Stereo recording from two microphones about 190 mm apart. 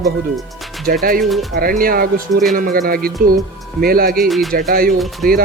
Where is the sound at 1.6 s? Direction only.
50° right (ahead or behind).